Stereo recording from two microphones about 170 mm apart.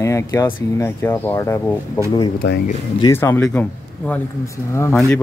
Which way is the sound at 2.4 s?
90° left.